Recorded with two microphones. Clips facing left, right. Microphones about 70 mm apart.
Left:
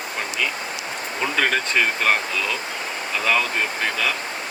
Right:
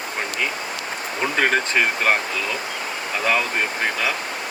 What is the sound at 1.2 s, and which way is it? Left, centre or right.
Speech, right.